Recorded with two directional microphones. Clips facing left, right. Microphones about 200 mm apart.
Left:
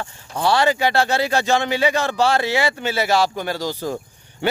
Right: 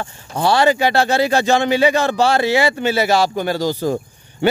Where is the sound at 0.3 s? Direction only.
40° right (ahead or behind).